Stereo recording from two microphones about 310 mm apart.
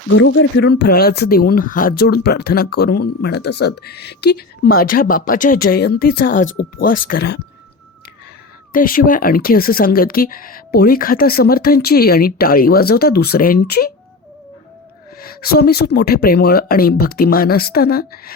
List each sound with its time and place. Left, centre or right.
0.1 s speech: left
8.7 s speech: left
15.2 s speech: left